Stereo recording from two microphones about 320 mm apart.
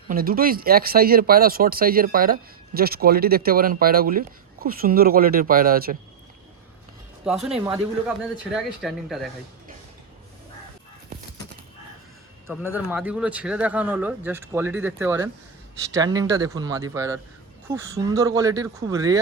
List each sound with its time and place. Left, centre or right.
0.1 s speech: right
7.3 s speech: centre
7.5 s speech: centre
8.0 s speech: centre
12.5 s speech: centre